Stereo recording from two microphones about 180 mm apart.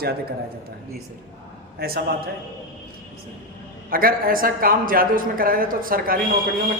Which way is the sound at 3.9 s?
55° right (ahead or behind).